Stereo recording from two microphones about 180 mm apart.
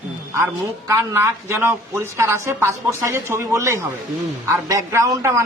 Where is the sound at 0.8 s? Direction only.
15° right (ahead or behind).